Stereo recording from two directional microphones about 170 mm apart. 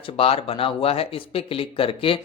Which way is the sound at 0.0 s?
35° left (ahead or behind).